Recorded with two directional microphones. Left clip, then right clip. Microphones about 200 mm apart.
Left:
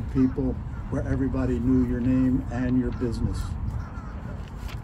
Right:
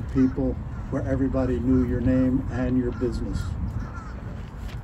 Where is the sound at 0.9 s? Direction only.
50° left (ahead or behind).